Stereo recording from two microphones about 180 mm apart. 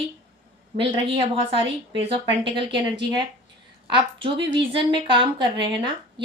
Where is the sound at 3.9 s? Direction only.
25° right (ahead or behind).